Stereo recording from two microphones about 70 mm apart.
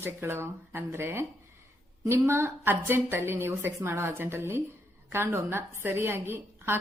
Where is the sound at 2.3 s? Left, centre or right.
Right.